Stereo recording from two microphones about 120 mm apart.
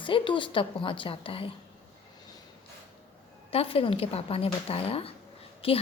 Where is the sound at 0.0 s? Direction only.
45° left (ahead or behind).